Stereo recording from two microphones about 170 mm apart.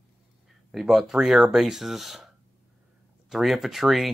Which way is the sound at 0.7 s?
Centre (ahead or behind).